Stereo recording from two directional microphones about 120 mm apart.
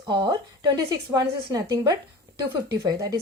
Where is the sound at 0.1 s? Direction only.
40° right (ahead or behind).